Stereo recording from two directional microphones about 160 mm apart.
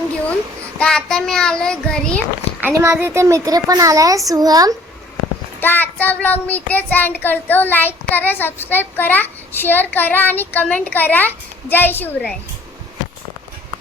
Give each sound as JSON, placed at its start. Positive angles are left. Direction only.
{"t": 0.8, "sound": "child singing", "side_deg": 5}
{"t": 2.6, "sound": "speech", "side_deg": -15}
{"t": 5.5, "sound": "child singing", "side_deg": 10}